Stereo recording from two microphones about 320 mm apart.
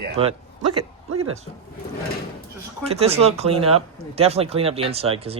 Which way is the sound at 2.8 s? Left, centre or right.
Centre.